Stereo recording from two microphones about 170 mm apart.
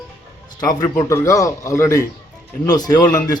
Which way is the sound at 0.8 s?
20° left (ahead or behind).